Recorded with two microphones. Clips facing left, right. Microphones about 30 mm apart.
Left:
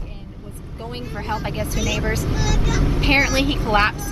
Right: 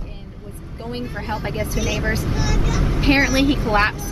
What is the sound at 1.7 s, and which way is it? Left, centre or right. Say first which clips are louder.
Speech: even; right.